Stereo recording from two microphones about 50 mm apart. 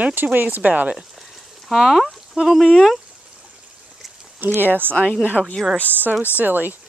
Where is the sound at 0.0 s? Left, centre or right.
Right.